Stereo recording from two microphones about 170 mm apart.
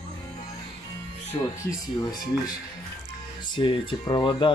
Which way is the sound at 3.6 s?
30° left (ahead or behind).